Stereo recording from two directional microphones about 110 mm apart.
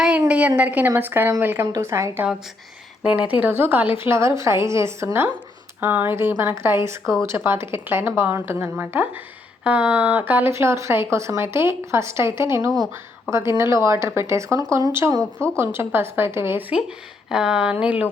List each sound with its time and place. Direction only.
0.3 s a woman's voice: 15° right (ahead or behind)
3.0 s a woman's voice: 10° right (ahead or behind); by 15.2 s 30° right (ahead or behind)
15.2 s speech: 10° left (ahead or behind)
15.5 s a woman's voice: 20° right (ahead or behind)
17.2 s a woman's voice: 5° right (ahead or behind)